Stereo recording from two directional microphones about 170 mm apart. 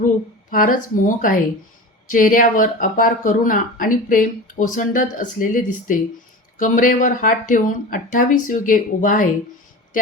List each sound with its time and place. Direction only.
0.5 s speech: 55° left (ahead or behind)